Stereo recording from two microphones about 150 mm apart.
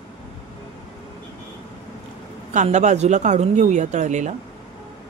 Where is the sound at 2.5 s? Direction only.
50° right (ahead or behind).